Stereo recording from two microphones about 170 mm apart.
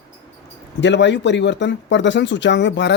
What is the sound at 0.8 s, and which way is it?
Speech, 90° left.